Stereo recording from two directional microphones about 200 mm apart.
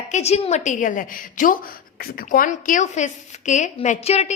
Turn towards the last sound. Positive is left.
turn(degrees=30)  # may be behind; listen again after turning